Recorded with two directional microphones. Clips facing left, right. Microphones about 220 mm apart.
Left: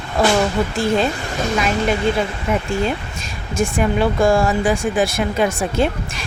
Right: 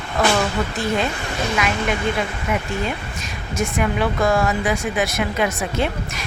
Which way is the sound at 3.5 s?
30° left (ahead or behind).